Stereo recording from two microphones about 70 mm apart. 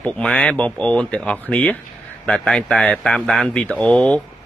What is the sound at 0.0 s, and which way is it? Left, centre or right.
A man's voice, centre.